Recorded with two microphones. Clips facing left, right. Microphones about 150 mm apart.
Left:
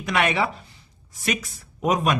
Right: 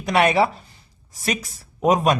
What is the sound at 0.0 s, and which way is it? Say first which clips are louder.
Speech: right 5 dB; 35° right (ahead or behind).